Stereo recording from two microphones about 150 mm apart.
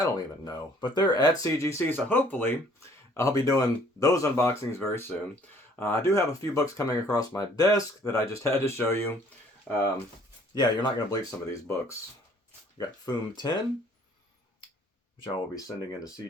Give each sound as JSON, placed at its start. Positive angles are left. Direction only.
{"t": 0.0, "sound": "speech", "side_deg": 25}
{"t": 10.5, "sound": "speech", "side_deg": 30}
{"t": 12.7, "sound": "speech", "side_deg": 30}
{"t": 15.2, "sound": "speech", "side_deg": 35}